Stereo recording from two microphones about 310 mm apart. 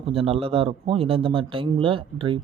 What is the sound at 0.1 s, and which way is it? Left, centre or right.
Speech, centre.